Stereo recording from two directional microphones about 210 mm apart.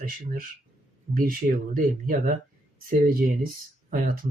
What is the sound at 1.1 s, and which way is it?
Speech, 40° right (ahead or behind).